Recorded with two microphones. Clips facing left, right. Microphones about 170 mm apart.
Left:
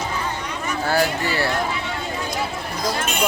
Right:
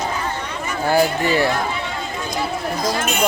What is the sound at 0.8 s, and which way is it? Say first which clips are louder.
Speech: right 4 dB; 15° right (ahead or behind).